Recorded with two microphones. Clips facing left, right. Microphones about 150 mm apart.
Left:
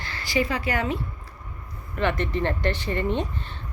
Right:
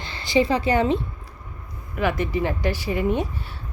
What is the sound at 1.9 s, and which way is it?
Speech, 5° right (ahead or behind).